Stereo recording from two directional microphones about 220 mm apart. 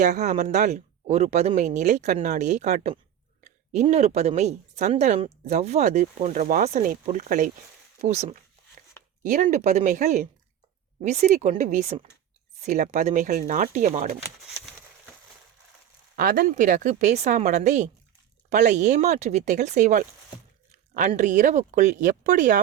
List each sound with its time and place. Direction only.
0.0 s speech: 35° right (ahead or behind)
16.1 s speech: 40° right (ahead or behind)
21.1 s speech: 35° right (ahead or behind)